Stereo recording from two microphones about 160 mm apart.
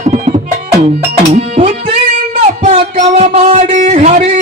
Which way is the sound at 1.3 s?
40° right (ahead or behind).